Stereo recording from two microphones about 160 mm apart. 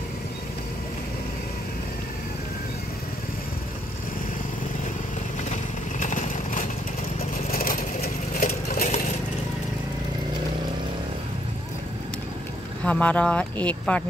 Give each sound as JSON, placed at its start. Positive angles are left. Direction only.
{"t": 5.9, "sound": "vehicle", "side_deg": 50}
{"t": 7.5, "sound": "vehicle", "side_deg": 60}
{"t": 8.7, "sound": "a sound", "side_deg": 50}
{"t": 12.8, "sound": "speech", "side_deg": 10}